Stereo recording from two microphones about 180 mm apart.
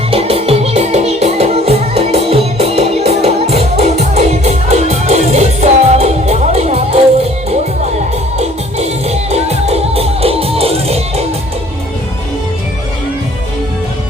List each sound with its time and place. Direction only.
0.1 s music: 30° right (ahead or behind)
8.4 s music: 35° right (ahead or behind)